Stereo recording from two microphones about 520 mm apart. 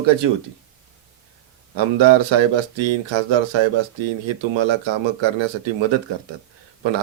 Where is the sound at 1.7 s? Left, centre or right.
Right.